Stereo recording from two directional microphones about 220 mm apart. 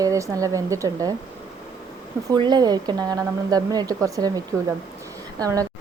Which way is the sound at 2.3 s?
20° right (ahead or behind).